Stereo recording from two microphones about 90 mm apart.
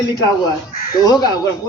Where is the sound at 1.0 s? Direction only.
50° left (ahead or behind).